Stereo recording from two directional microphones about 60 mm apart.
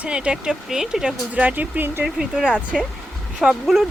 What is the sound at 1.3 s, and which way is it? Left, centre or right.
Speech, right.